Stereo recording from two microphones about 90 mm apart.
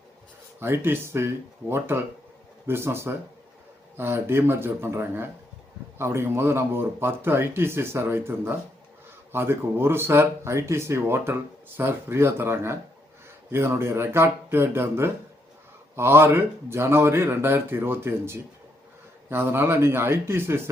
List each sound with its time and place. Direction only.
0.6 s speech: 25° right (ahead or behind)
2.6 s speech: 25° right (ahead or behind)